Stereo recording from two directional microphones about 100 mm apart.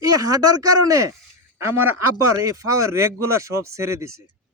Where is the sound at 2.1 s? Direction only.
30° right (ahead or behind).